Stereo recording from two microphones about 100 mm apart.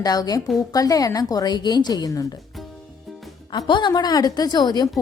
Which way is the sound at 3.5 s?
50° left (ahead or behind).